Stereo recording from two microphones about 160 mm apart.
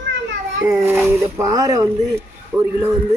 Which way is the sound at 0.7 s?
10° right (ahead or behind).